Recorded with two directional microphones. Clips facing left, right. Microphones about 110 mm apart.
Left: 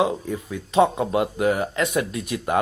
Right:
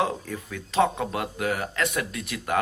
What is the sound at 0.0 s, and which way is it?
Speech, 20° left (ahead or behind).